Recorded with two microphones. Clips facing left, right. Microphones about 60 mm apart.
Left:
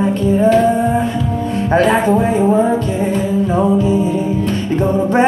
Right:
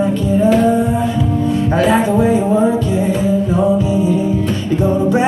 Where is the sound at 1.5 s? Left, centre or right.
Left.